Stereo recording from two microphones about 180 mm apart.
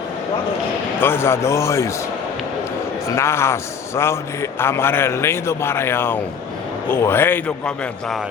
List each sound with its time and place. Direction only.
0.9 s a man's voice: 10° left (ahead or behind)
3.2 s a man's voice: 15° left (ahead or behind)